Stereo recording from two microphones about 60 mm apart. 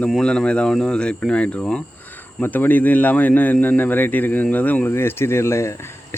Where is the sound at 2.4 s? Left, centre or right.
Left.